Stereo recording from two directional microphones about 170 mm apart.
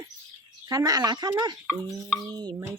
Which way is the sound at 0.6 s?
20° right (ahead or behind).